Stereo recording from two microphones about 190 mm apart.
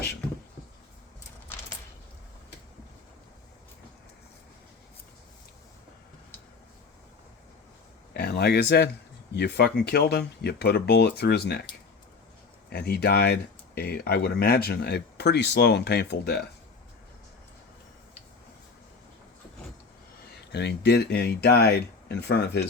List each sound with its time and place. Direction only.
8.1 s speech: 55° left (ahead or behind)
12.7 s speech: 55° left (ahead or behind)
20.5 s speech: 60° left (ahead or behind)